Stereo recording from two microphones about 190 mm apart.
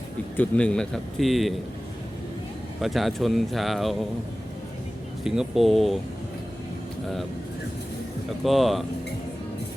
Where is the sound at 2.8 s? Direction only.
Centre (ahead or behind).